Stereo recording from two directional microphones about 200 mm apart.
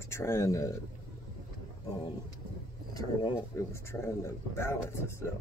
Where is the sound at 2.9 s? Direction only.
15° left (ahead or behind).